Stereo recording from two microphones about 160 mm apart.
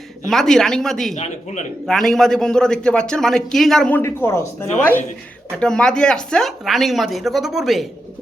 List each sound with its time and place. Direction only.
0.3 s a man's voice: 5° left (ahead or behind)
1.1 s speech: 50° left (ahead or behind)
1.9 s a man's voice: centre (ahead or behind); by 4.4 s 15° left (ahead or behind)
5.5 s a man's voice: 5° left (ahead or behind)